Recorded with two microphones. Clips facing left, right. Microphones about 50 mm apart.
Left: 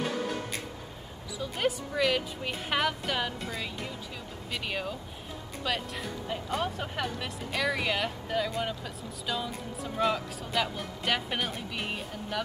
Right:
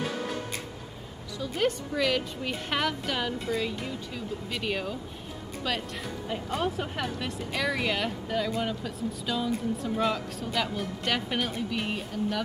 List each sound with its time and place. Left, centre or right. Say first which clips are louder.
1.4 s speech: right 2 dB; centre